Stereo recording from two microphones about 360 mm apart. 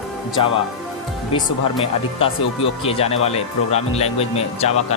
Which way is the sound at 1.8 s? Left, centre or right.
Centre.